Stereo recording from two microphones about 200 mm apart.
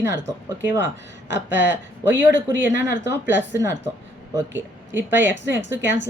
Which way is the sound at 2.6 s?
65° right (ahead or behind).